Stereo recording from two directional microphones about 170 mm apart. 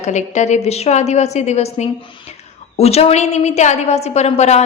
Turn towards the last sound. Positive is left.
turn(degrees=40)  # may be behind; listen again after turning